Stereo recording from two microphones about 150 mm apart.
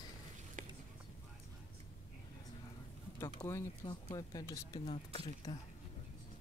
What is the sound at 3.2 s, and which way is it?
Speech, 20° left (ahead or behind).